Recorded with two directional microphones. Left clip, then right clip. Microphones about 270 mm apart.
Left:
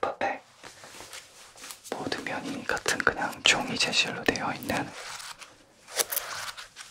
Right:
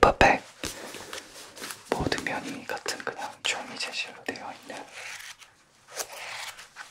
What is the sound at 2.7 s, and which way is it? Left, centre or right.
Whispering, left.